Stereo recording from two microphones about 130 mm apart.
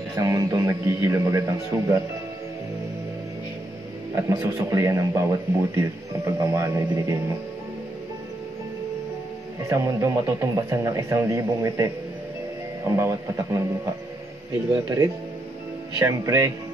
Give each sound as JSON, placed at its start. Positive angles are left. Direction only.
{"t": 0.2, "sound": "a man's voice", "side_deg": -25}
{"t": 4.1, "sound": "a man's voice", "side_deg": -20}
{"t": 9.7, "sound": "a man's voice", "side_deg": -20}
{"t": 14.7, "sound": "a man's voice", "side_deg": -25}